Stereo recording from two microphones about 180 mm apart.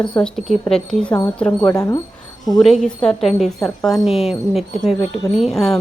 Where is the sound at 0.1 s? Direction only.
5° left (ahead or behind).